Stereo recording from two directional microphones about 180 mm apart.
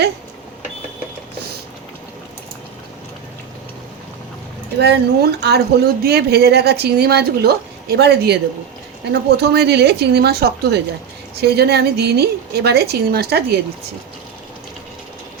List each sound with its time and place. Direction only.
4.8 s speech: 65° right (ahead or behind)